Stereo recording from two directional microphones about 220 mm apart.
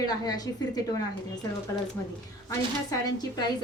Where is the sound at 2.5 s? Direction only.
15° left (ahead or behind).